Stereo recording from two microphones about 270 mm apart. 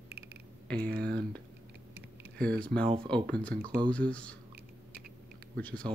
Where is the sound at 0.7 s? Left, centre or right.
Right.